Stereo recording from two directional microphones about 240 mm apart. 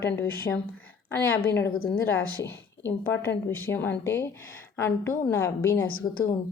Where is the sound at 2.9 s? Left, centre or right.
Centre.